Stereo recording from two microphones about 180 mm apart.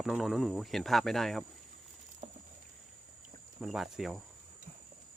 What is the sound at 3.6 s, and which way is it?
Speech, centre (ahead or behind).